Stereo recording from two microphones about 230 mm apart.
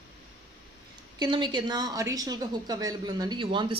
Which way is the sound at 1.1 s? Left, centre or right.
Centre.